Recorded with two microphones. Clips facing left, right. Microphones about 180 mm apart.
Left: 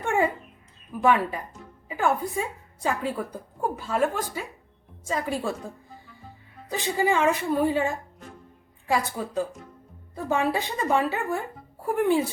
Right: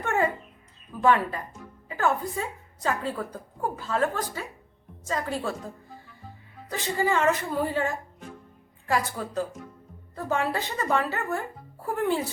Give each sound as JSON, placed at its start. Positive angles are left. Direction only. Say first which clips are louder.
{"t": 0.0, "sound": "a sound", "louder": "left 2 dB", "side_deg": 15}
{"t": 0.9, "sound": "a woman's voice", "louder": "even", "side_deg": 15}
{"t": 6.7, "sound": "a woman's voice", "louder": "left 2 dB", "side_deg": 15}